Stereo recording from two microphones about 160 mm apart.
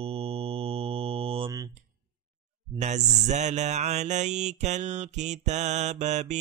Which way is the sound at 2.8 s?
45° right (ahead or behind).